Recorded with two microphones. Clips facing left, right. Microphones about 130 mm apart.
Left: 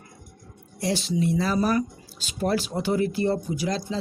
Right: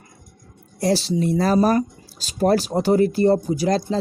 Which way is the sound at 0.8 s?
35° right (ahead or behind).